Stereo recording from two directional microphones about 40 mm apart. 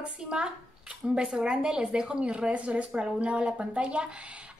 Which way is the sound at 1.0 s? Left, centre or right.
Centre.